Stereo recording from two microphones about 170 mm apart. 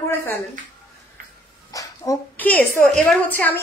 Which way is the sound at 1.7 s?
20° left (ahead or behind).